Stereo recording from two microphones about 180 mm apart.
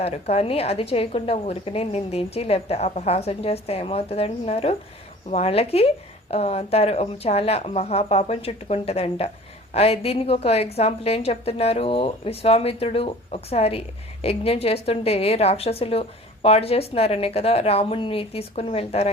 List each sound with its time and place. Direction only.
0.0 s a woman's voice: 35° left (ahead or behind)